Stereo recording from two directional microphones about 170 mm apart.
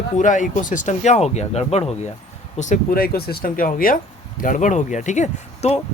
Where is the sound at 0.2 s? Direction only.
50° left (ahead or behind).